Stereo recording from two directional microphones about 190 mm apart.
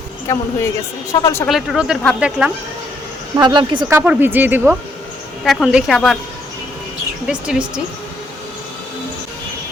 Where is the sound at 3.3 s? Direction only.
25° right (ahead or behind).